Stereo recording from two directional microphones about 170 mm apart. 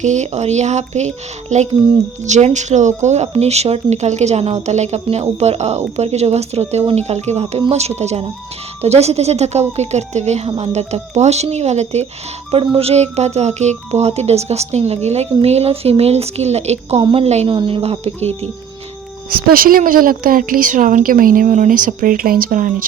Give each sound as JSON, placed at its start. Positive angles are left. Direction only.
{"t": 0.0, "sound": "speech", "side_deg": -45}
{"t": 19.3, "sound": "a woman's voice", "side_deg": -60}